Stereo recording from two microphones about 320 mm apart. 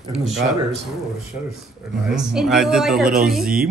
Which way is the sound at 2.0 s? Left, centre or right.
Centre.